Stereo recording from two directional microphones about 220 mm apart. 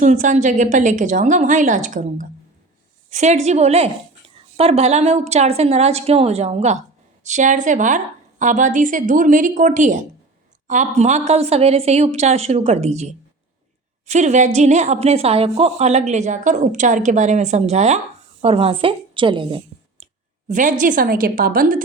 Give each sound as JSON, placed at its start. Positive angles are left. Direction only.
{"t": 0.0, "sound": "a woman's voice", "side_deg": -35}
{"t": 20.5, "sound": "a woman's voice", "side_deg": -35}